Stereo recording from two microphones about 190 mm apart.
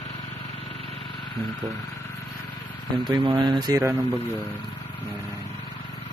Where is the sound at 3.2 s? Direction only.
25° right (ahead or behind).